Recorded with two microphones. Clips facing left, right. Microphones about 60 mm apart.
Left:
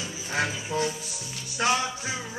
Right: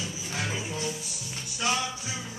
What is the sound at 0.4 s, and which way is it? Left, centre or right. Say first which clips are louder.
Music: left 6 dB; left.